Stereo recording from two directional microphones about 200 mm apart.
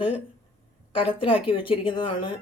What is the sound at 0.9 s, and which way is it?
A woman's voice, 25° left (ahead or behind).